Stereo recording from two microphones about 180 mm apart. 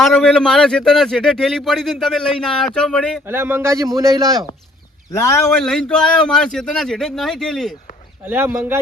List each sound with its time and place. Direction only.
0.0 s speech: centre (ahead or behind)
3.2 s speech: 10° right (ahead or behind)
5.5 s speech: 5° left (ahead or behind)
8.2 s speech: 10° right (ahead or behind)